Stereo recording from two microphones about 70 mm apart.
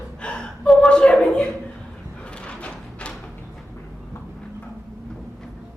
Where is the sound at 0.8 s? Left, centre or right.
Centre.